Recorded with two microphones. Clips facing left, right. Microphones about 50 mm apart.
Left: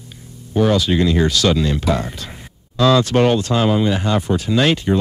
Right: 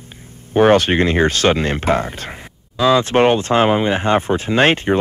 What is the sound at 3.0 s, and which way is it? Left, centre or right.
Speech, right.